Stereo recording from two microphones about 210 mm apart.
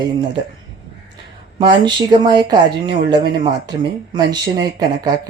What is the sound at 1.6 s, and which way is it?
Speech, 20° right (ahead or behind).